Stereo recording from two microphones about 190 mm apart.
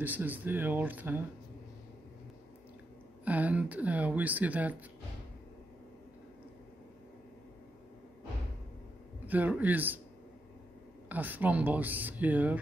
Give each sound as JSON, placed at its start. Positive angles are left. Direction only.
{"t": 0.0, "sound": "speech", "side_deg": -10}
{"t": 3.3, "sound": "speech", "side_deg": -10}
{"t": 9.2, "sound": "speech", "side_deg": -10}
{"t": 11.1, "sound": "speech", "side_deg": -10}